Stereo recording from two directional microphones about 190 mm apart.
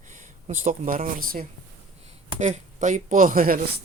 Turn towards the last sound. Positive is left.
turn(degrees=-45)  # may be behind; listen again after turning